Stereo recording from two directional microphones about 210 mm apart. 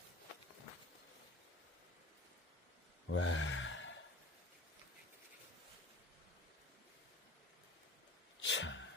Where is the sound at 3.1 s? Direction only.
65° left (ahead or behind).